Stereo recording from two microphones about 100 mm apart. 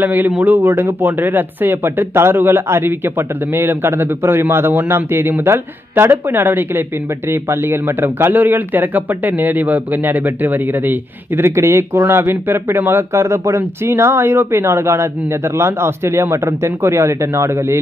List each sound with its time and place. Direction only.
0.0 s speech: 20° right (ahead or behind)